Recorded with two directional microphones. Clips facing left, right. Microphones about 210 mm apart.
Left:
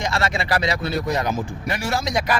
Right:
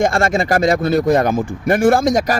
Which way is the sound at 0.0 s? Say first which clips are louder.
Right 8 dB; 50° right (ahead or behind).